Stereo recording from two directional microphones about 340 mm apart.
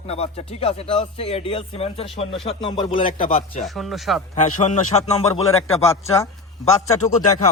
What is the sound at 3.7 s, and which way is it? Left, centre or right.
Speech, centre.